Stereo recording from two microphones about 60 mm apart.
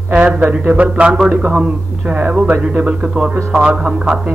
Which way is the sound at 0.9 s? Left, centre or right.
Centre.